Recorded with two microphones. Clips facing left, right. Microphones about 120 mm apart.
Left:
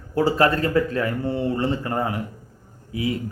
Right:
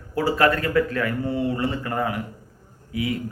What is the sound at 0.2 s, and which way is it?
A man's voice, 25° left (ahead or behind).